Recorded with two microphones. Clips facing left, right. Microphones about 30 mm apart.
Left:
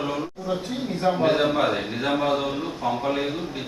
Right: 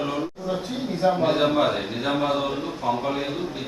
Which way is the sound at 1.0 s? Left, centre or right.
Centre.